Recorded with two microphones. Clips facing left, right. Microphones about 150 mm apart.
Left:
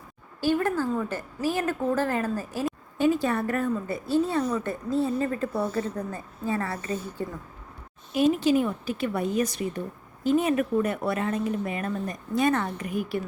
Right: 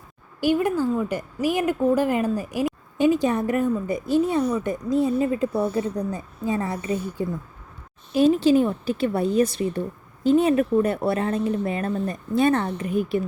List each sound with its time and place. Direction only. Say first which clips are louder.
0.3 s speech: right 3 dB; 15° right (ahead or behind)
8.1 s speech: right 4 dB; 30° right (ahead or behind)